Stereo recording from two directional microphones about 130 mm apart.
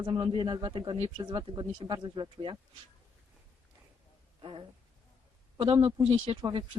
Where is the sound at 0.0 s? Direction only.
35° right (ahead or behind).